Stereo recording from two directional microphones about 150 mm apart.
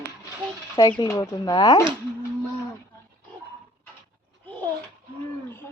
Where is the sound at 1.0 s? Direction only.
25° left (ahead or behind).